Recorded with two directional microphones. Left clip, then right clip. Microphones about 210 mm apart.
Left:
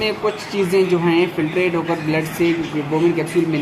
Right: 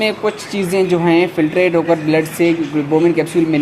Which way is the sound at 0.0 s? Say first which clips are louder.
Right 3 dB; 50° right (ahead or behind).